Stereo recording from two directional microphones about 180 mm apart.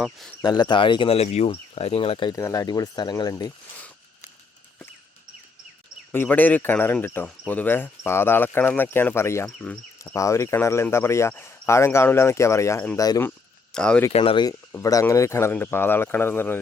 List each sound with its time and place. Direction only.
0.0 s speech: centre (ahead or behind)
0.4 s speech: 25° left (ahead or behind)
6.1 s speech: 10° left (ahead or behind)
13.7 s speech: 5° left (ahead or behind)
14.1 s speech: 30° left (ahead or behind); by 16.6 s 10° left (ahead or behind)